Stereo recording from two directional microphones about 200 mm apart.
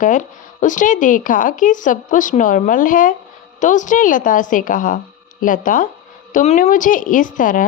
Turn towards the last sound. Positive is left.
turn(degrees=40)  # may be behind; listen again after turning